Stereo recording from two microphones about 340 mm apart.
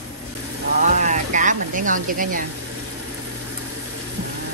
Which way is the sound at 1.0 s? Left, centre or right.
Right.